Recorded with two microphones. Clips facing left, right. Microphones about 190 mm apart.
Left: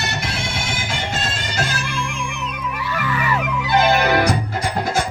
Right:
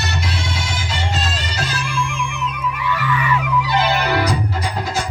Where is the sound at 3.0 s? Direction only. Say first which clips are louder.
Even; 40° left (ahead or behind).